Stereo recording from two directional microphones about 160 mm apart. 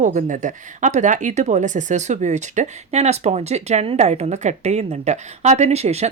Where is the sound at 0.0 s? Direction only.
50° right (ahead or behind).